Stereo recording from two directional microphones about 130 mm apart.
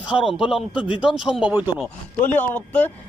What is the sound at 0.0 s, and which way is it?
A man's voice, 5° right (ahead or behind).